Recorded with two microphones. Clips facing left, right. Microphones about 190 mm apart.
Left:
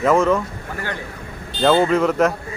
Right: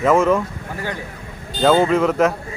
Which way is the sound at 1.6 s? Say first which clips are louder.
Right 1 dB; 5° right (ahead or behind).